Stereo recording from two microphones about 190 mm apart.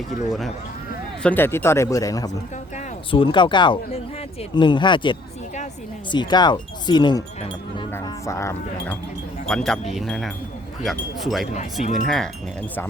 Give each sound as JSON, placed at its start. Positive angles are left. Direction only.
{"t": 1.2, "sound": "speech", "side_deg": 10}
{"t": 9.5, "sound": "speech", "side_deg": 5}
{"t": 11.5, "sound": "speech", "side_deg": 40}
{"t": 12.0, "sound": "speech", "side_deg": 0}